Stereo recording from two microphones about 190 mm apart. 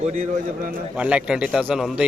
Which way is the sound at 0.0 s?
40° right (ahead or behind).